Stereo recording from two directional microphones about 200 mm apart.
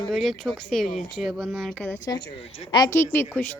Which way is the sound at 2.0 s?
25° left (ahead or behind).